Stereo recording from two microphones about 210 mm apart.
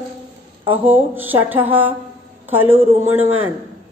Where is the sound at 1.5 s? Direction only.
25° right (ahead or behind).